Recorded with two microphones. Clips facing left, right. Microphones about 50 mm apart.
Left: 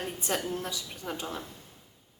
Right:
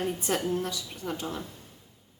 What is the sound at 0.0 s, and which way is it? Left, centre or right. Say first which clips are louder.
A woman's voice: right 3 dB; centre.